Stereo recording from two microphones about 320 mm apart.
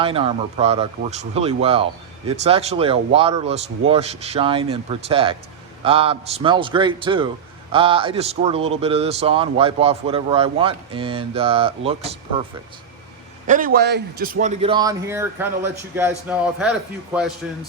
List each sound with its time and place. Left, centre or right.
0.0 s speech: centre
13.5 s a man's voice: right; by 17.6 s centre